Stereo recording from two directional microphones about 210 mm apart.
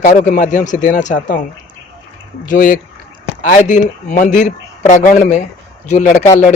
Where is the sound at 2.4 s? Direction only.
40° left (ahead or behind).